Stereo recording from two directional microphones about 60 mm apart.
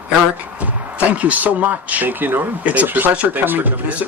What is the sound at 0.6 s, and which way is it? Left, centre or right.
Speech, right.